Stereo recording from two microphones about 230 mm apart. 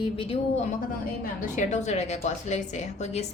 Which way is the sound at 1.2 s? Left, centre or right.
Left.